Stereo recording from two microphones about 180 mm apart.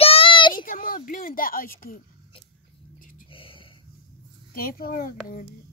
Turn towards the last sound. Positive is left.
turn(degrees=55)  # may be behind; listen again after turning